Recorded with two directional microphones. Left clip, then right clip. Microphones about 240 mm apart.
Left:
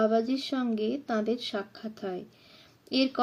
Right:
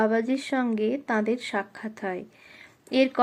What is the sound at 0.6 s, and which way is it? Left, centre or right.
Speech, centre.